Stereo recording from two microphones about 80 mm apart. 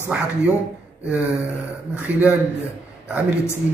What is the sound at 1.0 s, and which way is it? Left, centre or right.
A man's voice, centre.